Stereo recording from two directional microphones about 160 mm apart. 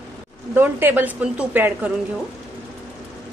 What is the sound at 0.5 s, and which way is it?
A woman's voice, 15° right (ahead or behind).